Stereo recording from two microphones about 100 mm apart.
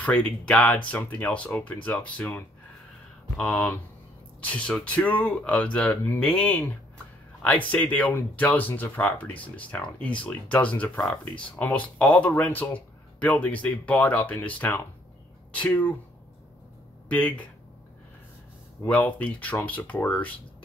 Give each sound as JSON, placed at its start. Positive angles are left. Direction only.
{"t": 0.0, "sound": "speech", "side_deg": 10}
{"t": 17.1, "sound": "speech", "side_deg": 15}
{"t": 18.9, "sound": "speech", "side_deg": 15}